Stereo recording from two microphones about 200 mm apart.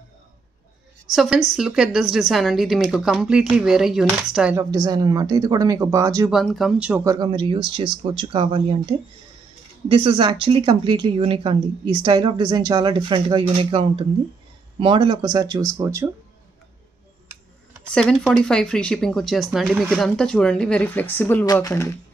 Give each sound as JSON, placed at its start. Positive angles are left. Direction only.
{"t": 1.1, "sound": "speech", "side_deg": 0}
{"t": 4.6, "sound": "speech", "side_deg": -20}
{"t": 6.3, "sound": "speech", "side_deg": 0}
{"t": 7.1, "sound": "speech", "side_deg": -20}
{"t": 9.8, "sound": "speech", "side_deg": -25}
{"t": 17.8, "sound": "speech", "side_deg": 5}